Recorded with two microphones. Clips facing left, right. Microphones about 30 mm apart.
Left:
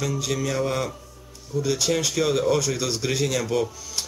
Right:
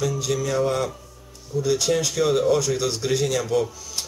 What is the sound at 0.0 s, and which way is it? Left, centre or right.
A man's voice, centre.